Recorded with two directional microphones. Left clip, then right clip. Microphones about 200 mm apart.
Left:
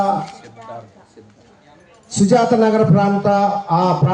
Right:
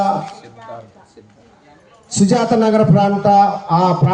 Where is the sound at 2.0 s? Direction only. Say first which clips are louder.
Left 1 dB; 50° right (ahead or behind).